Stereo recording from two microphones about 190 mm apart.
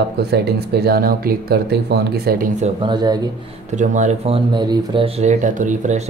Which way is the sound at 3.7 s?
40° right (ahead or behind).